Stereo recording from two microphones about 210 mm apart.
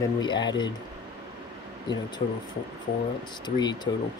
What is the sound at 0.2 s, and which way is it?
Speech, 20° left (ahead or behind).